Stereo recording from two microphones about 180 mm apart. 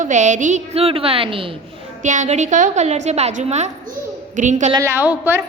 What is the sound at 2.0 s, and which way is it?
A woman's voice, 45° right (ahead or behind).